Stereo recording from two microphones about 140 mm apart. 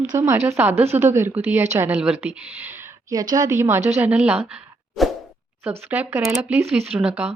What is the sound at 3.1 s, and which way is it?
A woman's voice, 25° right (ahead or behind).